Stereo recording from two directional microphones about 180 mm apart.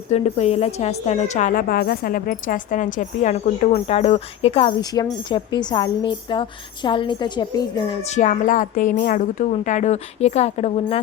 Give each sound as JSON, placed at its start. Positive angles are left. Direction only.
{"t": 0.1, "sound": "a woman's voice", "side_deg": 40}
{"t": 8.1, "sound": "a woman's voice", "side_deg": 45}